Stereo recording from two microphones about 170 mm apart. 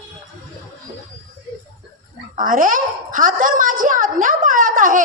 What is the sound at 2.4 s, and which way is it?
A woman's voice, 55° right (ahead or behind).